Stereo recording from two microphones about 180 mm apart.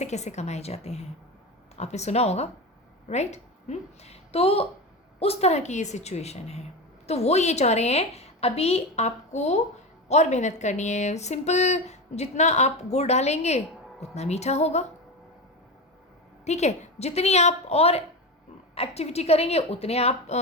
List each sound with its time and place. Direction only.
0.0 s a woman's voice: 40° left (ahead or behind)
16.4 s speech: 40° left (ahead or behind)